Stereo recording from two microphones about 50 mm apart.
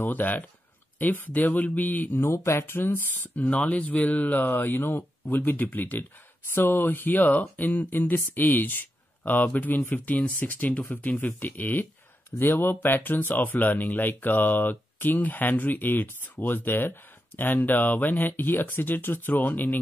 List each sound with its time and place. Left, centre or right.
0.0 s speech: left
2.1 s speech: left
6.5 s speech: left